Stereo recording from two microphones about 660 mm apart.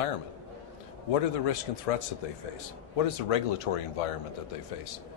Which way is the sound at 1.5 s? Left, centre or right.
Left.